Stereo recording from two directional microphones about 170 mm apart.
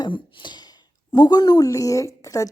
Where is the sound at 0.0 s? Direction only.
30° left (ahead or behind).